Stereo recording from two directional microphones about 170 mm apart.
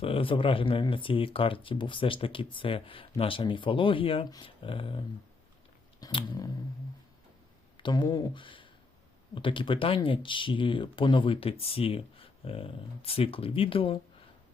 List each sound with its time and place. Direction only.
0.0 s speech: 35° left (ahead or behind)
6.0 s a sound: 30° left (ahead or behind)
7.8 s speech: 25° left (ahead or behind)